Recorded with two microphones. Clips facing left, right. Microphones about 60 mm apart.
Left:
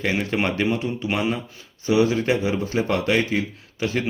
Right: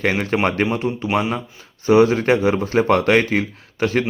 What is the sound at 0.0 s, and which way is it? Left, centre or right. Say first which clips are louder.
Speech: right 4 dB; right.